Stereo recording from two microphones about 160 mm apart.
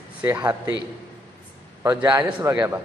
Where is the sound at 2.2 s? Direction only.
10° right (ahead or behind).